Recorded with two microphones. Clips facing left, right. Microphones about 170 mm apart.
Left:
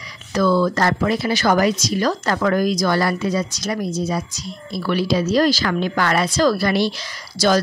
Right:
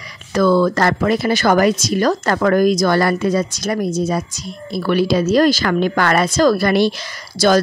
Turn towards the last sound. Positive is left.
turn(degrees=-55)  # may be behind; listen again after turning